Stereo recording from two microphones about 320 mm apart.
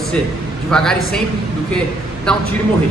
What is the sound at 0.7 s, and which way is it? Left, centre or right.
Speech, centre.